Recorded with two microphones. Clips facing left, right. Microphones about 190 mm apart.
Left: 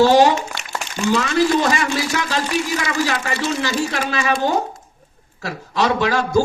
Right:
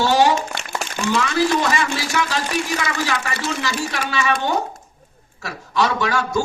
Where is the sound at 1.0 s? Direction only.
35° left (ahead or behind).